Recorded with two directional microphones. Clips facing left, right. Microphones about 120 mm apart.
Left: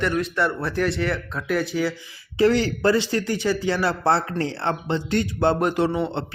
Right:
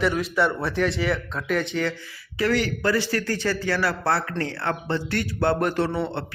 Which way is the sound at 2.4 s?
25° left (ahead or behind).